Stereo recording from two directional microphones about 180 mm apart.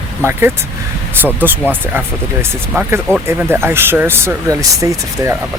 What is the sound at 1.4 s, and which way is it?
Speech, 10° right (ahead or behind).